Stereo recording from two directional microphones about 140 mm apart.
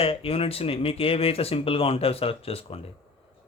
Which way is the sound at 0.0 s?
40° left (ahead or behind).